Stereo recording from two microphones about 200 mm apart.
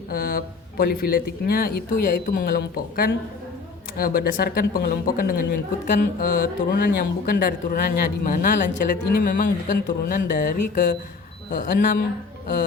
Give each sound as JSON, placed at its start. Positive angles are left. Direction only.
{"t": 0.1, "sound": "speech", "side_deg": 45}